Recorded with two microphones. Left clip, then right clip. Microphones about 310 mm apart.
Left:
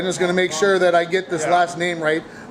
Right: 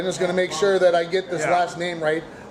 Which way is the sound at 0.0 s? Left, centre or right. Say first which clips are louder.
Left 3 dB; left.